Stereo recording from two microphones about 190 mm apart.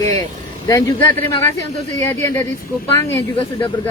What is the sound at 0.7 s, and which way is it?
Speech, 15° left (ahead or behind).